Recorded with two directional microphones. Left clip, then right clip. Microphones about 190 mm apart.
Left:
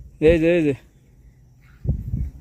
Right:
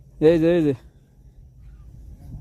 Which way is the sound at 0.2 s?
15° right (ahead or behind).